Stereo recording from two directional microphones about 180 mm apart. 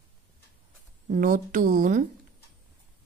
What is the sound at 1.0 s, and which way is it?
Speech, 45° right (ahead or behind).